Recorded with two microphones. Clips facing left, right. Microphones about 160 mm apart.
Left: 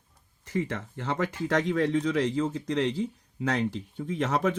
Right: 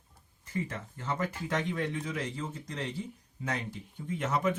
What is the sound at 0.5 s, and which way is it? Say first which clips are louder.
Speech: left 6 dB; 70° left (ahead or behind).